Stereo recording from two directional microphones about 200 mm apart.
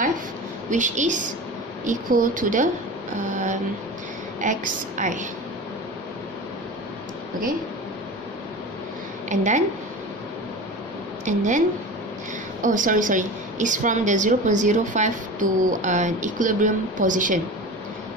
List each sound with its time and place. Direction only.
0.7 s a woman's voice: 40° right (ahead or behind)
9.3 s a woman's voice: 35° right (ahead or behind)
11.2 s a woman's voice: 40° right (ahead or behind)
12.6 s a woman's voice: 40° right (ahead or behind)